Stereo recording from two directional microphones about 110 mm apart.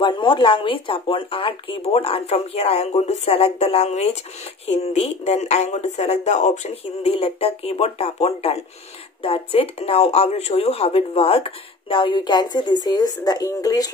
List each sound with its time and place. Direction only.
0.0 s speech: 50° left (ahead or behind); by 13.8 s 30° left (ahead or behind)